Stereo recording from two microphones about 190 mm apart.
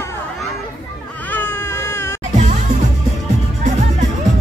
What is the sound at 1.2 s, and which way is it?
Baby cry, 10° left (ahead or behind).